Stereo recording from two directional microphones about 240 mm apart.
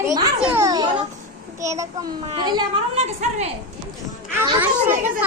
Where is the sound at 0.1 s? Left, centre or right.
Centre.